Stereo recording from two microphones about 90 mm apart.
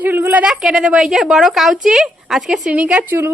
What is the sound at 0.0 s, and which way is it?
Speech, 20° right (ahead or behind).